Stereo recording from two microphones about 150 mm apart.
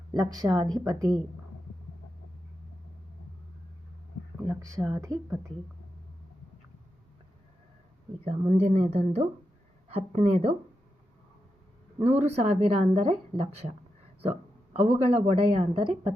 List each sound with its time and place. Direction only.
0.1 s speech: 25° right (ahead or behind)
4.4 s speech: 25° right (ahead or behind)
8.2 s a woman's voice: 50° right (ahead or behind)
12.2 s a woman's voice: 45° right (ahead or behind)